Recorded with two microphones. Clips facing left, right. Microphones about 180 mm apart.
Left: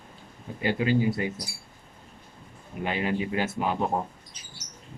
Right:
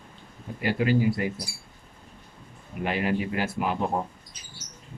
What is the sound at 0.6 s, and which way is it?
Speech, 25° left (ahead or behind).